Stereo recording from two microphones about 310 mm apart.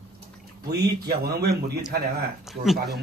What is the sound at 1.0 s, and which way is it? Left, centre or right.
Speech, right.